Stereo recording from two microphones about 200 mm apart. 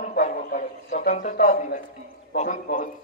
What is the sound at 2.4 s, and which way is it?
Speech, 40° left (ahead or behind).